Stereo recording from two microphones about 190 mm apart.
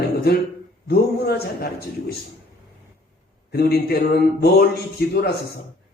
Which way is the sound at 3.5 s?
55° left (ahead or behind).